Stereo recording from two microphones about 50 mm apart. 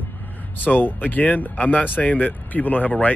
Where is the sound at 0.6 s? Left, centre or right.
Left.